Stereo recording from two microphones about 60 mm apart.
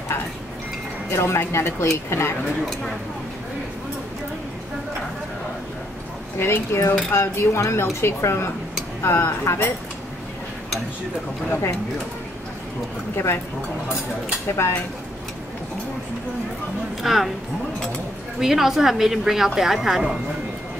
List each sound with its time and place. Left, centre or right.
1.1 s speech: left
6.4 s speech: left
13.1 s speech: left
17.0 s a woman's voice: centre
18.4 s a woman's voice: centre